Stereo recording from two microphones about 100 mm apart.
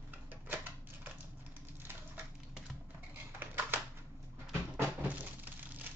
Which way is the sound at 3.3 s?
20° right (ahead or behind).